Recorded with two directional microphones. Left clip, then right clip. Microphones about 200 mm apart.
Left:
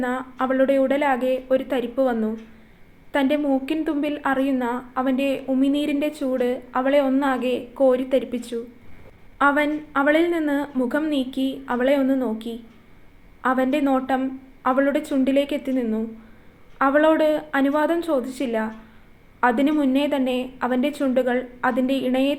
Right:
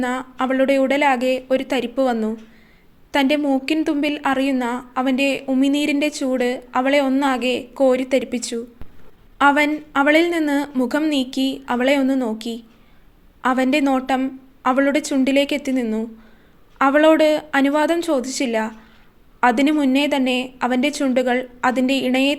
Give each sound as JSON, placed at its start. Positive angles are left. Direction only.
{"t": 0.0, "sound": "a woman's voice", "side_deg": -40}